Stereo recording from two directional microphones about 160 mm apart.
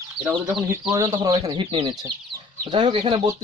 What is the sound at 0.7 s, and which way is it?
Speech, 20° right (ahead or behind).